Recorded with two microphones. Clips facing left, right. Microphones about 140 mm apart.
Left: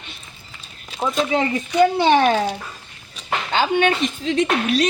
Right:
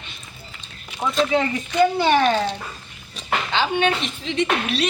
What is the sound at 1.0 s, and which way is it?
Speech, 30° left (ahead or behind).